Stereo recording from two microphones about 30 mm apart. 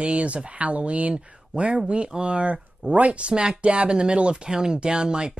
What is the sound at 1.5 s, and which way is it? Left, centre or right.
Speech, right.